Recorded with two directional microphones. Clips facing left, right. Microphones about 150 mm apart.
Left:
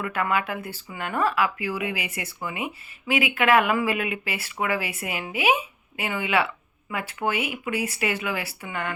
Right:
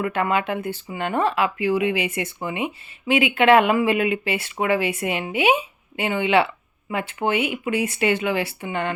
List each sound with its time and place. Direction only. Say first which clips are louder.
0.0 s speech: right 4 dB; 25° right (ahead or behind)